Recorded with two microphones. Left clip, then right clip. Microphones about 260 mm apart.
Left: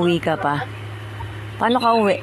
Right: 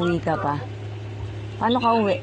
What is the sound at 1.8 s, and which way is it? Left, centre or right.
Speech, left.